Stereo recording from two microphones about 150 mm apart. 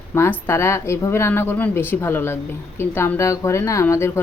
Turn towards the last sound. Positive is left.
turn(degrees=20)  # may be behind; listen again after turning